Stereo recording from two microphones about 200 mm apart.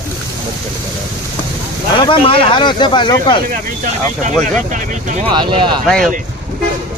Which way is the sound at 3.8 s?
40° right (ahead or behind).